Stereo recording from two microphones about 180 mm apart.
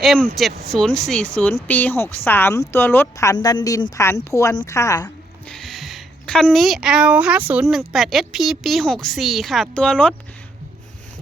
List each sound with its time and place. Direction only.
0.0 s a woman's voice: centre (ahead or behind); by 5.0 s 15° left (ahead or behind)
5.0 s a woman's voice: 5° left (ahead or behind)